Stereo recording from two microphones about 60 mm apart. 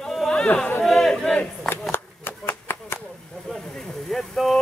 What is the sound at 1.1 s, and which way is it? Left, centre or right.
Battle cry, centre.